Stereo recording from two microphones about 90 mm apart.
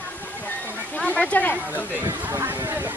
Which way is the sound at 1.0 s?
15° left (ahead or behind).